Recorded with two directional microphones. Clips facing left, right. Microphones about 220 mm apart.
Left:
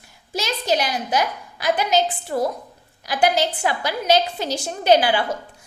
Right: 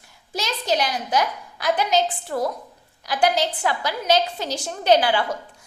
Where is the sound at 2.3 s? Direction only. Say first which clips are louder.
Left 3 dB; 15° left (ahead or behind).